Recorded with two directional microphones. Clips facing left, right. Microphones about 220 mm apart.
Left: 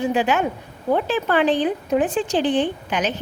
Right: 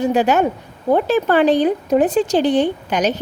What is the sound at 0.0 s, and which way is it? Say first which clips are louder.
A woman's voice: right 4 dB; 40° right (ahead or behind).